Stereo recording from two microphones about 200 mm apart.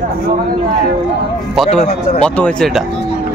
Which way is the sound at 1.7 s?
35° left (ahead or behind).